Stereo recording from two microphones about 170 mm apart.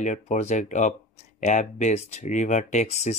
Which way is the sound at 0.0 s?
45° left (ahead or behind).